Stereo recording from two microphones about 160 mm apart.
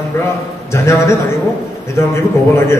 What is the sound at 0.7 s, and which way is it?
Speech, 15° left (ahead or behind).